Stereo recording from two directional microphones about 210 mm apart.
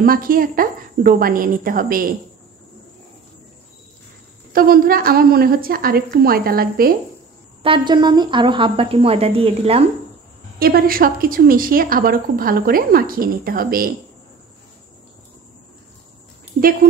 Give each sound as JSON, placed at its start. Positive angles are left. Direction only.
{"t": 0.0, "sound": "a woman's voice", "side_deg": -40}
{"t": 4.5, "sound": "a woman's voice", "side_deg": -45}
{"t": 7.6, "sound": "speech", "side_deg": -25}
{"t": 10.6, "sound": "a woman's voice", "side_deg": -45}